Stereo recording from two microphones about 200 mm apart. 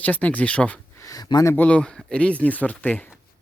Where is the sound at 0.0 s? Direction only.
5° left (ahead or behind).